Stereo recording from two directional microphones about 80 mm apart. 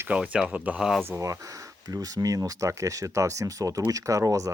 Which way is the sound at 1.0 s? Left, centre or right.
Right.